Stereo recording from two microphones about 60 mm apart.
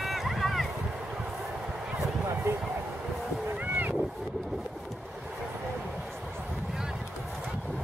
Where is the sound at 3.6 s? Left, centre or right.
Right.